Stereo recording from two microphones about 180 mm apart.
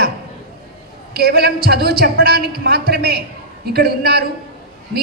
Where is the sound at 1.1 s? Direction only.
60° right (ahead or behind).